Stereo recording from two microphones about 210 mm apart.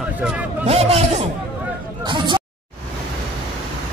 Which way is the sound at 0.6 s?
30° right (ahead or behind).